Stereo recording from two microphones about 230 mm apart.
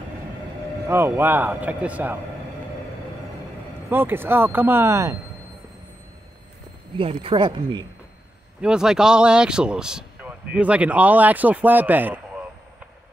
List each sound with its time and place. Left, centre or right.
0.8 s a man's voice: centre
3.9 s a man's voice: centre
7.0 s speech: right
8.5 s speech: centre